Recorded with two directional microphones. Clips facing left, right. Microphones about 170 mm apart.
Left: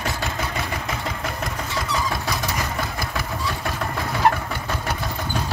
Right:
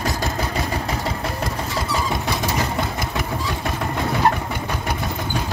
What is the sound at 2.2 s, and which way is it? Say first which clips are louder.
Vehicle: right 3 dB; 25° right (ahead or behind).